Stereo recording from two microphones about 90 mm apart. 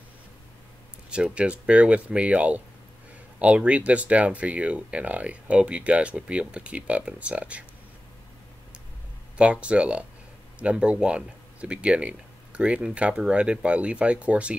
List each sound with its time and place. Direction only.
1.1 s speech: 10° right (ahead or behind)
9.4 s speech: 15° right (ahead or behind)